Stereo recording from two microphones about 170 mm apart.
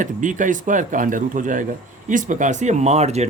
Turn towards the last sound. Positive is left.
turn(degrees=-40)  # may be behind; listen again after turning